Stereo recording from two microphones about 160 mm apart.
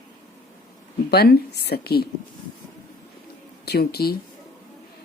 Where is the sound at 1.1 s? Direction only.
85° left.